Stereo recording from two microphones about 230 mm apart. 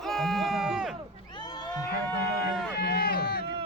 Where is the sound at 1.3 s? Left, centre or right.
Centre.